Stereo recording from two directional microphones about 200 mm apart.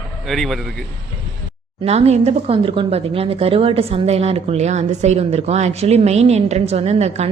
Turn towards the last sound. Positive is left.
turn(degrees=-35)  # may be behind; listen again after turning